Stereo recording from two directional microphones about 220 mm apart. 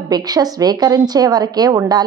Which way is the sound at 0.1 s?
15° right (ahead or behind).